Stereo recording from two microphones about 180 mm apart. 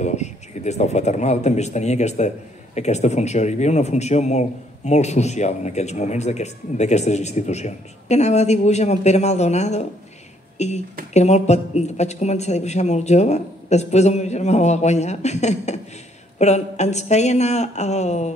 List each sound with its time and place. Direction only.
0.0 s a man's voice: 40° left (ahead or behind)